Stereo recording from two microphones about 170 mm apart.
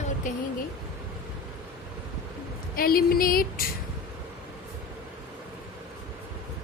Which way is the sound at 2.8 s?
60° left (ahead or behind).